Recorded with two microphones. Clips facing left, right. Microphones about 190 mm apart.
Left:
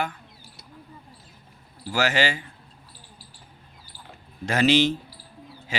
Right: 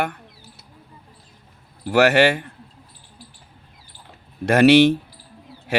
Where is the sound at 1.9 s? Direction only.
65° right (ahead or behind).